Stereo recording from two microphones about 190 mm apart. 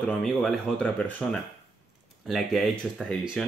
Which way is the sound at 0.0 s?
Centre (ahead or behind).